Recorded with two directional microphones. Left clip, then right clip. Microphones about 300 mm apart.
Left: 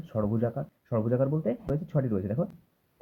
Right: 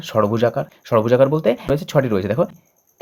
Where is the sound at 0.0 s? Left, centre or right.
Centre.